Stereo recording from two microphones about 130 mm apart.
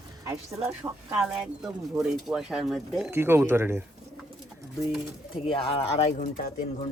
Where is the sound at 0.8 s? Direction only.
20° right (ahead or behind).